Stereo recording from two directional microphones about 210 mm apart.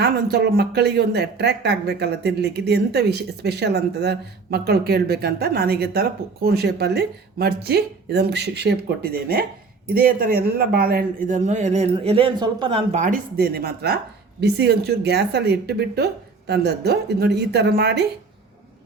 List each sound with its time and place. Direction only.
0.0 s a man's voice: 50° right (ahead or behind)